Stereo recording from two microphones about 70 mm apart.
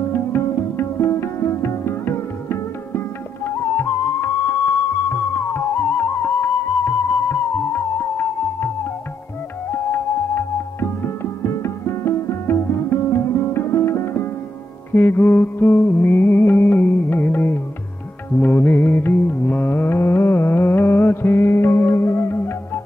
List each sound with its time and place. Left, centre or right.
0.1 s music: left
9.7 s music: left